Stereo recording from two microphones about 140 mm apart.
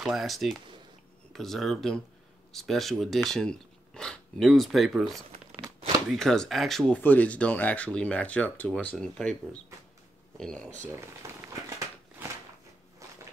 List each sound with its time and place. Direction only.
0.0 s speech: centre (ahead or behind)
7.0 s speech: 10° left (ahead or behind)
11.2 s a sound: 20° right (ahead or behind)